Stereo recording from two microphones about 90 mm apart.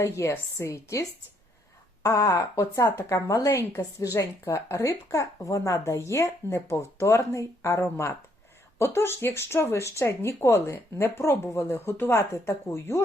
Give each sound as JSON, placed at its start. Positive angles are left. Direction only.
{"t": 0.0, "sound": "a woman's voice", "side_deg": 35}
{"t": 2.0, "sound": "a woman's voice", "side_deg": 40}